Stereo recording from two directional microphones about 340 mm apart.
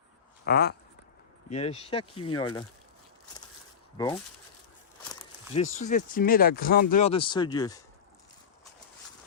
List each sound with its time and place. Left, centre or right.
0.4 s speech: left
3.9 s speech: centre
5.2 s speech: centre